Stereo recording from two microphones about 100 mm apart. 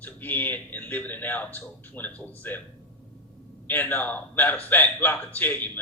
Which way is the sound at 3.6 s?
20° left (ahead or behind).